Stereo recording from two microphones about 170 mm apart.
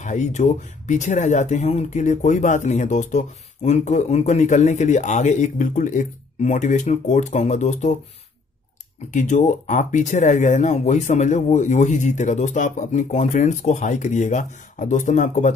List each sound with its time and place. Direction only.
0.0 s speech: 45° left (ahead or behind)
9.1 s speech: 45° left (ahead or behind)